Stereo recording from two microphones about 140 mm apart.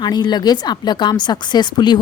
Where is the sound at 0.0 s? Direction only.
30° left (ahead or behind).